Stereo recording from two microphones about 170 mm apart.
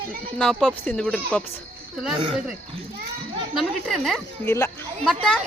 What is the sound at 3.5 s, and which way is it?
Speech, centre (ahead or behind).